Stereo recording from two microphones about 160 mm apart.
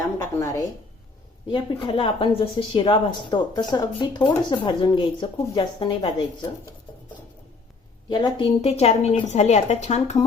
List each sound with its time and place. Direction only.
0.3 s speech: 20° left (ahead or behind)
1.5 s speech: 30° left (ahead or behind)
8.1 s a woman's voice: 30° left (ahead or behind)